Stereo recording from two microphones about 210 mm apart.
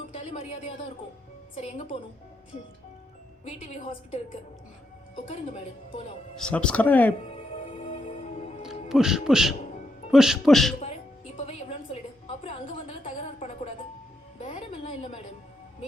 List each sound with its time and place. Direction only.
0.1 s a sound: 30° left (ahead or behind)
1.5 s a woman's voice: 35° left (ahead or behind)
3.4 s a woman's voice: 30° left (ahead or behind)
6.3 s speech: 5° left (ahead or behind)
7.3 s music: 30° left (ahead or behind)
8.9 s speech: centre (ahead or behind)
10.8 s a woman's voice: 30° left (ahead or behind)